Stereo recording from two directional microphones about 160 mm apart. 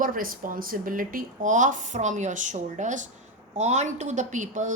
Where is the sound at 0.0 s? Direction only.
60° right (ahead or behind).